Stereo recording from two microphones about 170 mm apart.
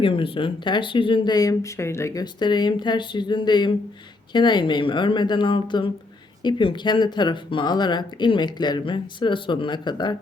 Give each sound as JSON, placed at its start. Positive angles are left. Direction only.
{"t": 0.0, "sound": "speech", "side_deg": 30}